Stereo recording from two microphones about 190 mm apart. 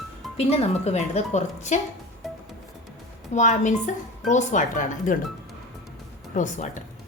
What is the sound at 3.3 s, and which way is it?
Speech, 40° left (ahead or behind).